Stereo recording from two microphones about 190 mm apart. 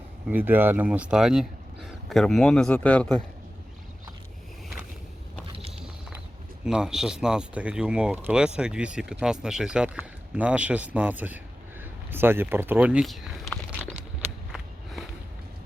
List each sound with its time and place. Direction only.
0.3 s speech: 10° right (ahead or behind); by 3.2 s 5° left (ahead or behind)
6.7 s speech: 5° right (ahead or behind)
11.8 s a sound: 10° right (ahead or behind)